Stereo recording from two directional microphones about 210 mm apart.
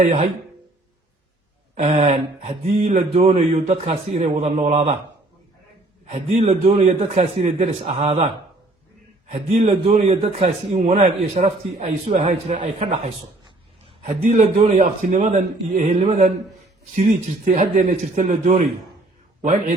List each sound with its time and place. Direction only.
0.0 s speech: 30° right (ahead or behind)
1.7 s speech: 30° right (ahead or behind)
6.1 s speech: 30° right (ahead or behind)
9.3 s a man's voice: 35° right (ahead or behind)
14.0 s a man's voice: 35° right (ahead or behind)